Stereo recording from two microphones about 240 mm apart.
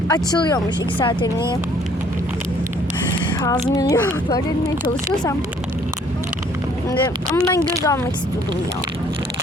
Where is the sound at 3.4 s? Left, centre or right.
Centre.